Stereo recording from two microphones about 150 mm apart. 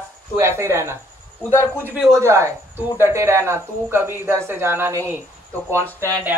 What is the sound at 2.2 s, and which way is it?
Speech, 20° right (ahead or behind).